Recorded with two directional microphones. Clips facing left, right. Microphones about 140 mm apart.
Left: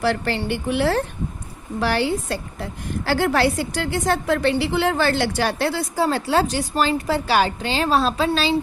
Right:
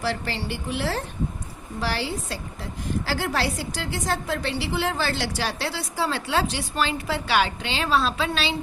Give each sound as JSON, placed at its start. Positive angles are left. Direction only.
{"t": 0.0, "sound": "a woman's voice", "side_deg": 60}